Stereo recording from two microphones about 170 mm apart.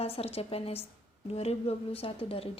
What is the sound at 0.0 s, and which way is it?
A woman's voice, 35° left (ahead or behind).